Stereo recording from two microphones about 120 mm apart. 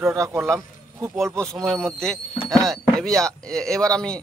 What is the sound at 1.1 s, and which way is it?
Speech, 5° left (ahead or behind).